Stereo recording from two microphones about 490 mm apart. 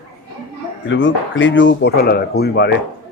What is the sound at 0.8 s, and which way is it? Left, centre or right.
A man's voice, left.